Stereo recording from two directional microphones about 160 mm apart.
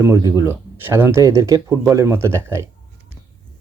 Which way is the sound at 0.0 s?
20° right (ahead or behind).